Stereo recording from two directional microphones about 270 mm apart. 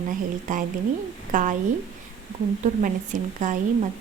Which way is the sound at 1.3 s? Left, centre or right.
Right.